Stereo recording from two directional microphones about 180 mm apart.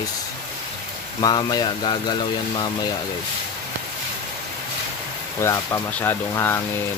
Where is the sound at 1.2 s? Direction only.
20° left (ahead or behind).